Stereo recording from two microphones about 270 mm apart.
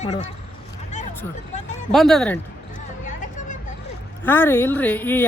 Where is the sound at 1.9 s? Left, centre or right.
Centre.